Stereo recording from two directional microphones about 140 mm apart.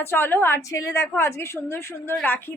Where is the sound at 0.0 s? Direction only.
15° left (ahead or behind).